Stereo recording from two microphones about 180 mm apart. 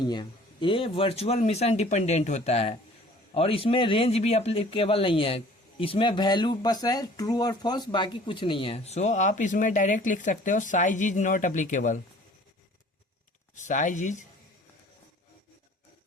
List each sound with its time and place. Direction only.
0.1 s speech: 25° left (ahead or behind); by 11.9 s 45° left (ahead or behind)
13.6 s speech: 45° left (ahead or behind)